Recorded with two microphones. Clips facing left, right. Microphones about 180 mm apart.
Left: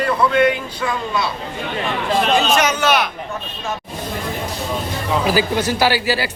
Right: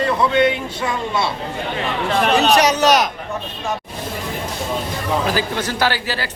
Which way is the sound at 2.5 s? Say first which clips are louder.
Right 3 dB; 35° right (ahead or behind).